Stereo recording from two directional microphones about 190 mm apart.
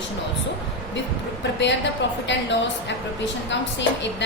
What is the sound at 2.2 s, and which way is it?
A woman's voice, 70° left (ahead or behind).